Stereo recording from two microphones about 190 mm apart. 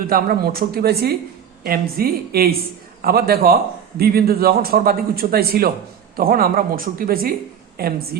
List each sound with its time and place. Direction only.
0.1 s a man's voice: 50° right (ahead or behind)